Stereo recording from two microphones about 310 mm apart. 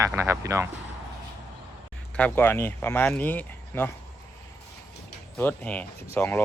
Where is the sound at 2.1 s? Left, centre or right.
Centre.